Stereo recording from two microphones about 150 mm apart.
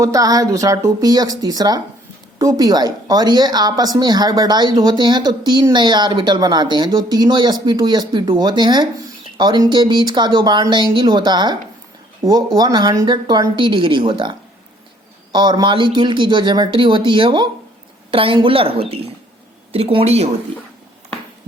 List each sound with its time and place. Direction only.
0.0 s speech: 25° right (ahead or behind); by 20.3 s 45° right (ahead or behind)